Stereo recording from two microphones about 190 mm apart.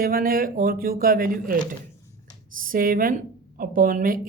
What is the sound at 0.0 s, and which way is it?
A woman's voice, 50° right (ahead or behind).